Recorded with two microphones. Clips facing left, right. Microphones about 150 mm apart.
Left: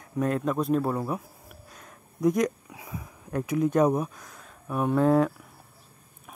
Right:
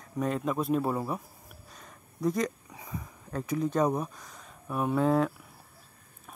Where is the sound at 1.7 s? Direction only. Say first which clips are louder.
Left 2 dB; 10° left (ahead or behind).